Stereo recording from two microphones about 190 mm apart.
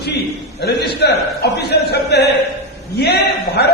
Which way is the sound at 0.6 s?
60° left (ahead or behind).